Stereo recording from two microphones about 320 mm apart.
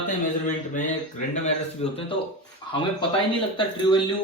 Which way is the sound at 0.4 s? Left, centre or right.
Left.